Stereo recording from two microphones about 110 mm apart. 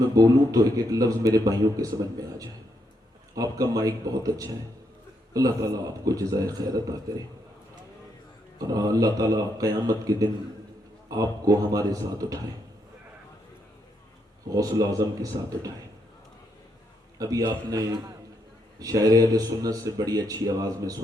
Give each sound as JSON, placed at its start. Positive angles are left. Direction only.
{"t": 0.0, "sound": "a man's voice", "side_deg": -35}
{"t": 8.5, "sound": "a man's voice", "side_deg": -35}
{"t": 14.5, "sound": "a man's voice", "side_deg": -35}
{"t": 17.2, "sound": "a man's voice", "side_deg": -30}